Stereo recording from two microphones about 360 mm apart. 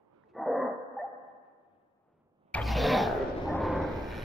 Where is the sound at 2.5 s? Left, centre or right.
Centre.